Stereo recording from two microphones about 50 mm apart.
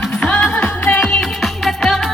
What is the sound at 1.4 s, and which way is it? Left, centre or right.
Music, centre.